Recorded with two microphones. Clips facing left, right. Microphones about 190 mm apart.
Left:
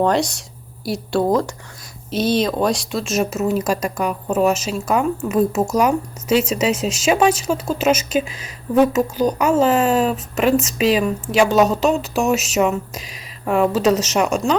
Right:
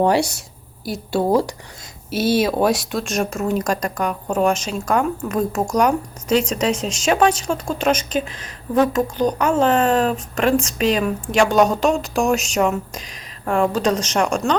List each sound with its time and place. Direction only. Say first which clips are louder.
0.0 s speech: right 1 dB; 10° right (ahead or behind)